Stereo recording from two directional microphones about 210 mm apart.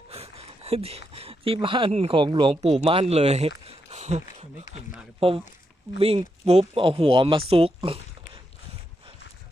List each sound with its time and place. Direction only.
0.1 s speech: 30° right (ahead or behind)